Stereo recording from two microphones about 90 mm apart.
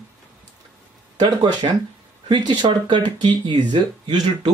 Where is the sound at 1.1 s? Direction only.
60° right (ahead or behind).